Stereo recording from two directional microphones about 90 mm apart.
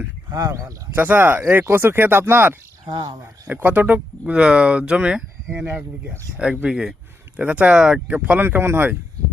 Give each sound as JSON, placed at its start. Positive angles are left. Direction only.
{"t": 0.3, "sound": "speech", "side_deg": -45}
{"t": 0.9, "sound": "speech", "side_deg": -20}
{"t": 2.9, "sound": "speech", "side_deg": -50}
{"t": 3.4, "sound": "speech", "side_deg": -20}